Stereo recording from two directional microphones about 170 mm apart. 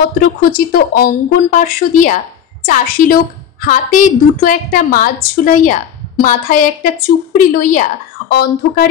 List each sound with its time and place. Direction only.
0.4 s a woman's voice: 60° left (ahead or behind)
8.3 s speech: 65° left (ahead or behind)